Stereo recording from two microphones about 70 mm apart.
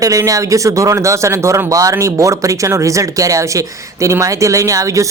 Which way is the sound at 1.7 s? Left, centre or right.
Right.